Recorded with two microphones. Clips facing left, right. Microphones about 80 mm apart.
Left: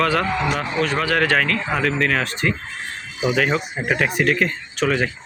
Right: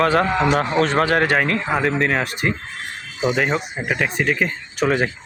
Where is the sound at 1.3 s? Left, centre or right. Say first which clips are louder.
Right 1 dB; right.